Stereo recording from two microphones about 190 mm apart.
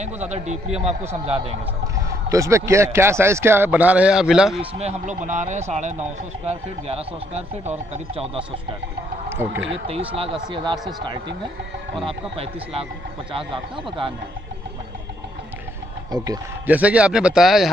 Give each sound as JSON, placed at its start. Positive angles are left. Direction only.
{"t": 0.3, "sound": "speech", "side_deg": -35}
{"t": 2.0, "sound": "speech", "side_deg": -15}
{"t": 4.6, "sound": "speech", "side_deg": -35}
{"t": 9.7, "sound": "speech", "side_deg": -30}
{"t": 12.0, "sound": "speech", "side_deg": -30}
{"t": 16.6, "sound": "speech", "side_deg": -10}